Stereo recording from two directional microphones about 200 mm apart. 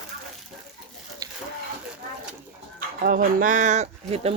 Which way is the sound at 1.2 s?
15° right (ahead or behind).